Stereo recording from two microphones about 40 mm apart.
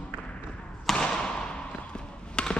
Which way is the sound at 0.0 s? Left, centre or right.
Left.